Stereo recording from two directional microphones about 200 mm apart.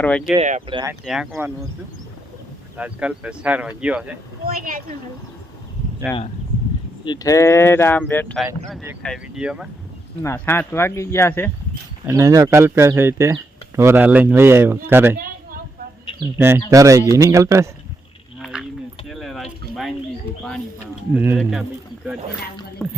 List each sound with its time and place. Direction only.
0.3 s speech: 40° right (ahead or behind)
0.7 s speech: 20° right (ahead or behind)
1.0 s speech: centre (ahead or behind)
2.7 s speech: 5° right (ahead or behind)
6.1 s speech: 5° left (ahead or behind)
7.0 s speech: 20° left (ahead or behind)
9.0 s speech: 5° right (ahead or behind)
10.2 s speech: 10° left (ahead or behind)
12.0 s speech: 15° right (ahead or behind)
16.2 s speech: 10° right (ahead or behind)
18.3 s a sound: 5° right (ahead or behind)
21.1 s speech: 10° right (ahead or behind)
22.8 s speech: 5° left (ahead or behind)